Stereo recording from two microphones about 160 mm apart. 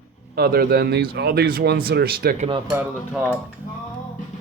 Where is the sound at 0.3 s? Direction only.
75° right (ahead or behind).